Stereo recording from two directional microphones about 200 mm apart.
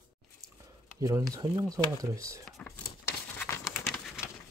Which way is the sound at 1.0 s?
15° right (ahead or behind).